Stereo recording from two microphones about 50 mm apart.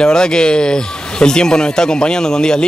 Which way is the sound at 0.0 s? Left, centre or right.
Centre.